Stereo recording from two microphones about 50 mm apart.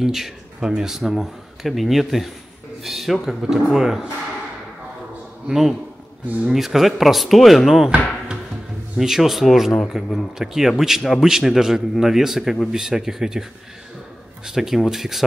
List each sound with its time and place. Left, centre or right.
0.0 s a man's voice: centre
3.4 s speech: centre
5.5 s speech: centre
6.2 s speech: right
6.5 s speech: centre
8.9 s speech: centre